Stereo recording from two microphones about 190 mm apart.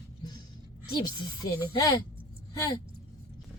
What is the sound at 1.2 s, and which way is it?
Speech, 20° left (ahead or behind).